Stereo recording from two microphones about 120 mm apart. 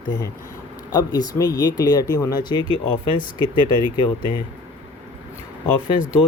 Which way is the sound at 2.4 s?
40° left (ahead or behind).